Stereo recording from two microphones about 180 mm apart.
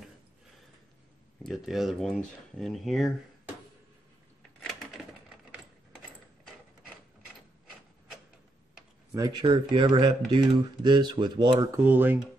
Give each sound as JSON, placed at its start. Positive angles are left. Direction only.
{"t": 1.4, "sound": "speech", "side_deg": 0}
{"t": 4.6, "sound": "typewriter", "side_deg": 0}
{"t": 9.1, "sound": "speech", "side_deg": -25}
{"t": 11.8, "sound": "speech", "side_deg": -10}